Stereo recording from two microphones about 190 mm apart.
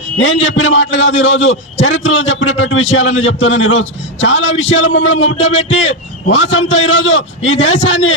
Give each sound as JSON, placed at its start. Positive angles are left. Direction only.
{"t": 0.4, "sound": "a man's voice", "side_deg": 90}